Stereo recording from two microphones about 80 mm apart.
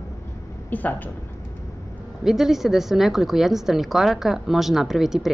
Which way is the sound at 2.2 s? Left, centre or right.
Centre.